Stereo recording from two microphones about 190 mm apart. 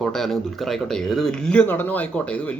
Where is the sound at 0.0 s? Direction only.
Centre (ahead or behind).